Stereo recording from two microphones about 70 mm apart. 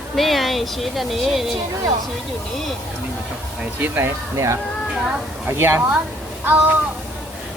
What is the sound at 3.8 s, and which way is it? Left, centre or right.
Speech, right.